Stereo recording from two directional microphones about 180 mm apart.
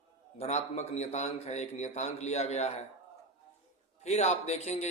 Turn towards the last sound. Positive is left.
turn(degrees=40)  # may be behind; listen again after turning